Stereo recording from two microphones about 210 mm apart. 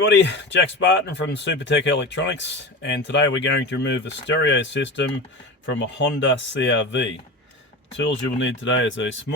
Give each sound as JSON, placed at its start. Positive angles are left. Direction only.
{"t": 0.0, "sound": "speech", "side_deg": 55}